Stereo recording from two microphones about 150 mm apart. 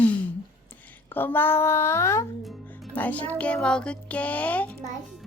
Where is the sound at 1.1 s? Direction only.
15° left (ahead or behind).